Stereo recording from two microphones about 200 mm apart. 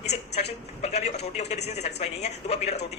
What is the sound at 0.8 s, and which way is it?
A man's voice, 30° left (ahead or behind).